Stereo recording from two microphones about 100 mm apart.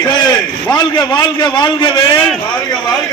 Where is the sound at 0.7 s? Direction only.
45° left (ahead or behind).